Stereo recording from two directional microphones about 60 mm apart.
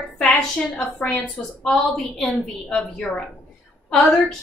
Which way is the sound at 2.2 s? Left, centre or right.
Centre.